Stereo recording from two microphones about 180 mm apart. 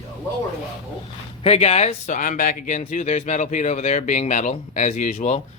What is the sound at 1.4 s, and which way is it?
Speech, 35° left (ahead or behind).